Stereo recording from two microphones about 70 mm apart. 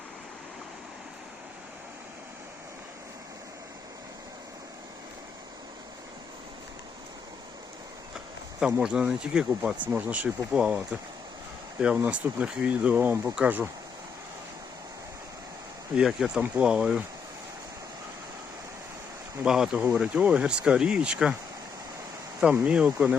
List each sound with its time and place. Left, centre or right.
8.6 s speech: centre
11.8 s speech: centre
16.0 s speech: centre
19.5 s speech: centre
22.5 s speech: centre